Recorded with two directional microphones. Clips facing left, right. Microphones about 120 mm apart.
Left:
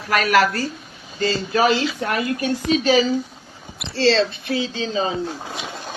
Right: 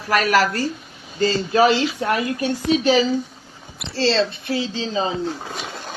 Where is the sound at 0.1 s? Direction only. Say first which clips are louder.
Even; 35° right (ahead or behind).